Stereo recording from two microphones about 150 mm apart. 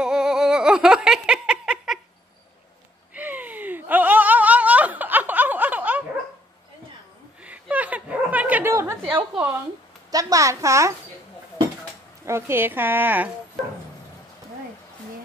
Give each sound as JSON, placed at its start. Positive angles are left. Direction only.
{"t": 0.0, "sound": "giggle", "side_deg": -5}
{"t": 3.2, "sound": "laughter", "side_deg": -10}
{"t": 7.4, "sound": "a sound", "side_deg": -10}
{"t": 10.1, "sound": "speech", "side_deg": -20}
{"t": 12.3, "sound": "a woman's voice", "side_deg": -15}